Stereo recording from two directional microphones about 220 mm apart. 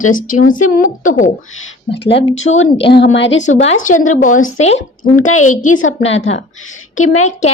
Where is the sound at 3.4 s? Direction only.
30° left (ahead or behind).